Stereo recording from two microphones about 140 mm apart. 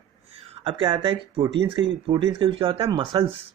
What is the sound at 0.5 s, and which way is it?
Speech, 35° right (ahead or behind).